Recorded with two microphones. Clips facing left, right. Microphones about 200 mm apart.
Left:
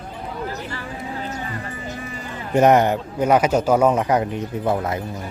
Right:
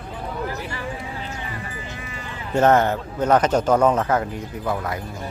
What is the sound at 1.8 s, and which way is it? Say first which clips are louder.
Sheep: left 4 dB; 45° left (ahead or behind).